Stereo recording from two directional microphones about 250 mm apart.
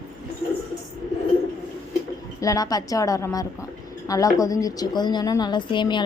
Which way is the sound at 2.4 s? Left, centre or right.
Centre.